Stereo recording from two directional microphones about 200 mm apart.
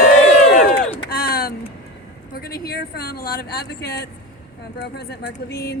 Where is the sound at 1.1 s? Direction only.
50° left (ahead or behind).